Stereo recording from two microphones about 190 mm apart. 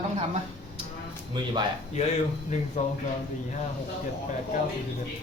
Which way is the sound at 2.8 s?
40° left (ahead or behind).